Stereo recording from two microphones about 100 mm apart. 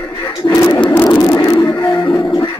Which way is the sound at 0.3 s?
40° left (ahead or behind).